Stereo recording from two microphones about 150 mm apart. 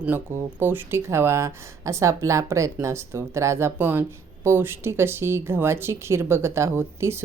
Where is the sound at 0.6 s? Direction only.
15° right (ahead or behind).